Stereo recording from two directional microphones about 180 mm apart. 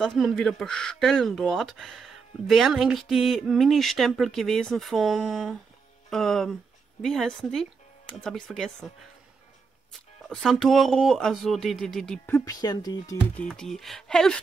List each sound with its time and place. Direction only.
0.0 s speech: centre (ahead or behind)
9.9 s speech: centre (ahead or behind)
12.3 s speech: 15° left (ahead or behind)
13.4 s speech: 5° left (ahead or behind)